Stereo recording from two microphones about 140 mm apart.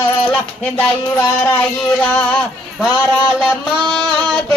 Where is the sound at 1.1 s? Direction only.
10° left (ahead or behind).